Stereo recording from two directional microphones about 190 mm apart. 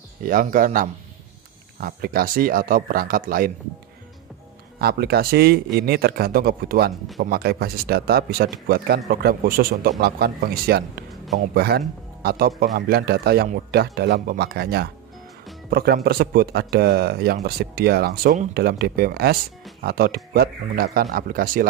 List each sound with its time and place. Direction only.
0.2 s speech: 45° right (ahead or behind)
4.7 s speech: 55° right (ahead or behind)